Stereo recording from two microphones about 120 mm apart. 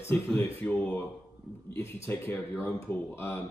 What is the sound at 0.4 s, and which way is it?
Speech, 15° left (ahead or behind).